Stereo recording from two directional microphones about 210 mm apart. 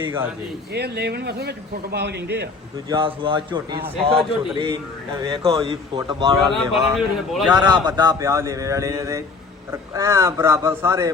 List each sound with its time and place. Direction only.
0.7 s a man's voice: 50° right (ahead or behind)
2.9 s a man's voice: 25° right (ahead or behind)
6.5 s speech: centre (ahead or behind)
7.5 s speech: 20° right (ahead or behind)